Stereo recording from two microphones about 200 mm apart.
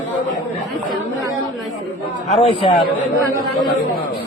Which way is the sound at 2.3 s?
30° left (ahead or behind).